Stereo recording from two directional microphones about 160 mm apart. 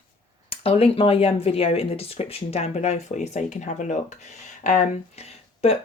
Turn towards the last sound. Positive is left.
turn(degrees=40)  # may be behind; listen again after turning